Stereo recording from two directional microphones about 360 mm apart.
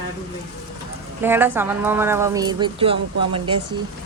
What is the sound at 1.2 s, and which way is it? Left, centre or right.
Speech, centre.